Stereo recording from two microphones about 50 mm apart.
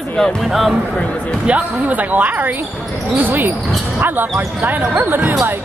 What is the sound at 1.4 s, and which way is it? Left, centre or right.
Speech, right.